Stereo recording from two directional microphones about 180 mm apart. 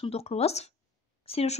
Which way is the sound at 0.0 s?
35° left (ahead or behind).